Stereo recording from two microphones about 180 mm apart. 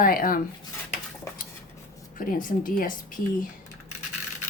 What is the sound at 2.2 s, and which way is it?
Speech, 50° left (ahead or behind).